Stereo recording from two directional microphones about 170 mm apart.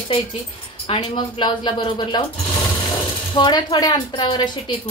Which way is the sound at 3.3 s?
25° left (ahead or behind).